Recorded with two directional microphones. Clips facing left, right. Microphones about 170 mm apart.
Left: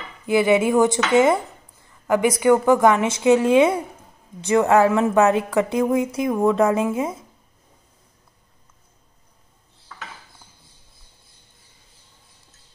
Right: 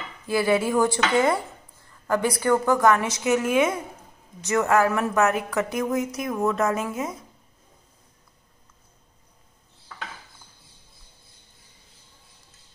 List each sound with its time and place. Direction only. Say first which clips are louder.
0.3 s a woman's voice: left 5 dB; 20° left (ahead or behind)